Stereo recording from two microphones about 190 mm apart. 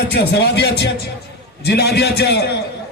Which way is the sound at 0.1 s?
60° left (ahead or behind).